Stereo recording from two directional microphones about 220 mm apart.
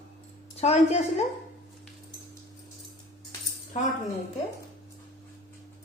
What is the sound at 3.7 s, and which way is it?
Speech, 35° left (ahead or behind).